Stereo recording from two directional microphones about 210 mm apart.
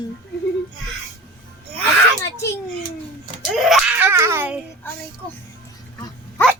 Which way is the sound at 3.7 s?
5° right (ahead or behind).